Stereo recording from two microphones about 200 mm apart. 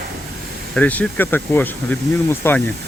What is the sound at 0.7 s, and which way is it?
Speech, 5° left (ahead or behind).